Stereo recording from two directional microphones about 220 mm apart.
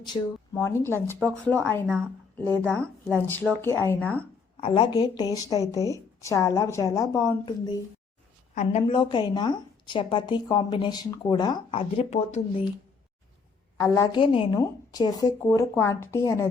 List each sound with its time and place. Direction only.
0.0 s a woman's voice: 15° left (ahead or behind)
1.9 s speech: 10° right (ahead or behind)
2.6 s a woman's voice: 5° left (ahead or behind)
2.8 s speech: 10° right (ahead or behind)
3.2 s a woman's voice: 10° left (ahead or behind)
4.6 s a woman's voice: 20° left (ahead or behind)
13.7 s a woman's voice: 15° left (ahead or behind)